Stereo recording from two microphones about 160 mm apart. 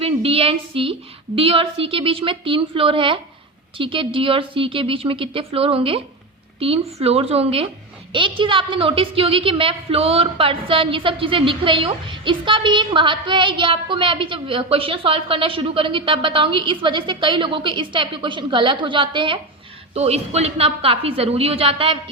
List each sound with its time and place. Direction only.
0.0 s a woman's voice: 35° right (ahead or behind)
19.9 s a woman's voice: 40° right (ahead or behind)